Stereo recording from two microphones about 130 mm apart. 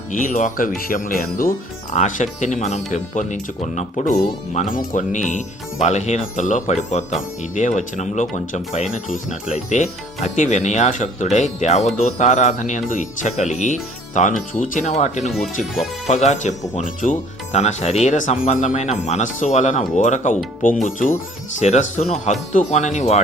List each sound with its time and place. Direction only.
0.1 s speech: 90° left
1.9 s speech: 70° left (ahead or behind)
9.0 s speech: 80° left; by 23.2 s 60° left (ahead or behind)